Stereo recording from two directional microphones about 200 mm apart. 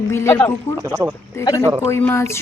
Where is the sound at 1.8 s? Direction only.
15° left (ahead or behind).